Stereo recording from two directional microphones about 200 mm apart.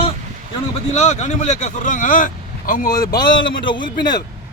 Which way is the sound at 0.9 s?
35° left (ahead or behind).